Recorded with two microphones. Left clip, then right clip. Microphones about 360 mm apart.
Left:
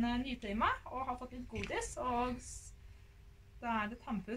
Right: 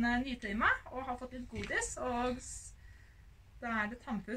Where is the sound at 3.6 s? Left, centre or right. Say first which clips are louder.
Right 1 dB; centre.